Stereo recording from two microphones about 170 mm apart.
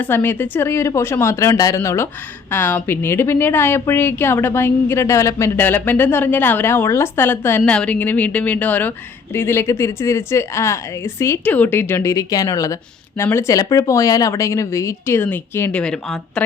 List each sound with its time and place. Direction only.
0.0 s a woman's voice: 10° left (ahead or behind)